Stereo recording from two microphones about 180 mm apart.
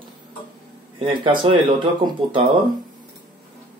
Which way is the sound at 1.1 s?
30° right (ahead or behind).